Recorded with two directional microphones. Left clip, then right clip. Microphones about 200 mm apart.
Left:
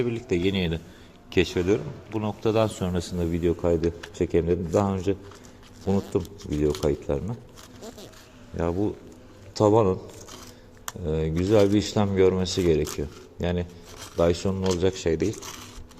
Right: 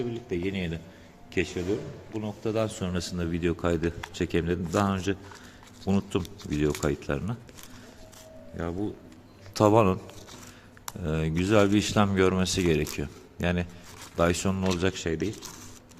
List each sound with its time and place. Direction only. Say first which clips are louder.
0.0 s a man's voice: left 6 dB; 25° left (ahead or behind)
2.5 s a man's voice: left 6 dB; 10° left (ahead or behind)
2.8 s speech: left 3 dB; 5° right (ahead or behind)
3.2 s speech: left 5 dB; 15° right (ahead or behind)
6.1 s speech: left 3 dB; 30° right (ahead or behind)
8.5 s speech: left 7 dB; centre (ahead or behind)
9.6 s speech: left 1 dB; 35° right (ahead or behind)
11.0 s speech: left 3 dB; 30° right (ahead or behind)